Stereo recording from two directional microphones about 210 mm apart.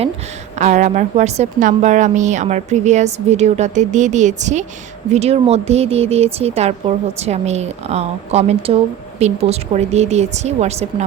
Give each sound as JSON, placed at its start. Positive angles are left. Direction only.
{"t": 0.6, "sound": "speech", "side_deg": -35}